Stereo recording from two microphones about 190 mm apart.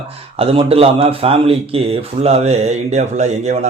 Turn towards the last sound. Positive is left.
turn(degrees=-35)  # may be behind; listen again after turning